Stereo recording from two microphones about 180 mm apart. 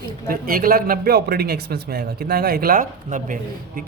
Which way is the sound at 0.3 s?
55° right (ahead or behind).